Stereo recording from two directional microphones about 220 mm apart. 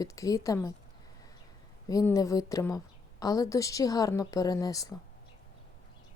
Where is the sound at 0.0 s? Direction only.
15° left (ahead or behind).